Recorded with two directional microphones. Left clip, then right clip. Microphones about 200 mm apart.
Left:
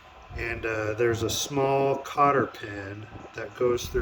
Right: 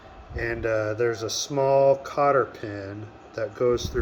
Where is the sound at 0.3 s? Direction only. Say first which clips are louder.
Right 4 dB; centre (ahead or behind).